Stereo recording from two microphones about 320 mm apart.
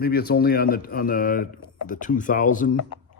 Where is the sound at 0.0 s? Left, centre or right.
Left.